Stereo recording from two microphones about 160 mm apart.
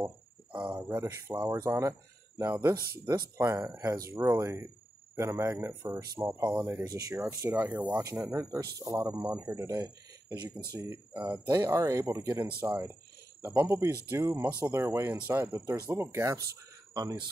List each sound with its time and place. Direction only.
0.7 s speech: 15° right (ahead or behind)
11.4 s speech: 25° right (ahead or behind)